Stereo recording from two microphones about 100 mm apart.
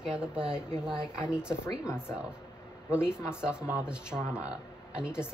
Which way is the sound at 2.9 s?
10° right (ahead or behind).